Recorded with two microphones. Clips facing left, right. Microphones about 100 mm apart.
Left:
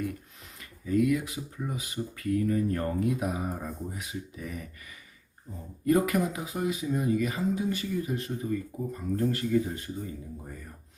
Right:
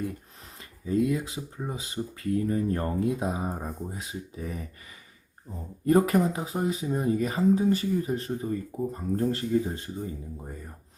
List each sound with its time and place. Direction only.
0.9 s speech: 30° right (ahead or behind)
5.8 s speech: 30° right (ahead or behind)